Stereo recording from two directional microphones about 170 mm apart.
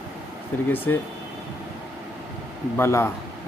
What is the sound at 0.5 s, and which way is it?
Speech, 10° left (ahead or behind).